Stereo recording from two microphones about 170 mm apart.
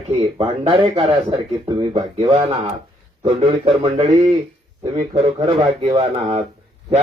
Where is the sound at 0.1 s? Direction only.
30° right (ahead or behind).